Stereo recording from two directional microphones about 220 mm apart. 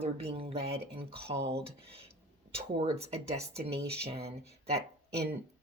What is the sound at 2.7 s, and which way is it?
Speech, 25° right (ahead or behind).